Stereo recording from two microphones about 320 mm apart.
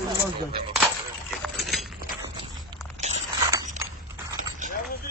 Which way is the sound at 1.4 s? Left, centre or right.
Centre.